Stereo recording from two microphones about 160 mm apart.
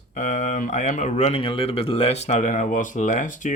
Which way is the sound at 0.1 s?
55° left (ahead or behind).